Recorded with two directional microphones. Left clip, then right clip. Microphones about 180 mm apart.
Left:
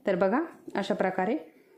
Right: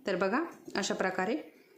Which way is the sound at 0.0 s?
30° left (ahead or behind).